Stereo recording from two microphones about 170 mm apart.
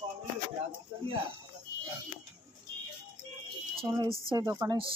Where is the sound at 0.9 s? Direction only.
30° right (ahead or behind).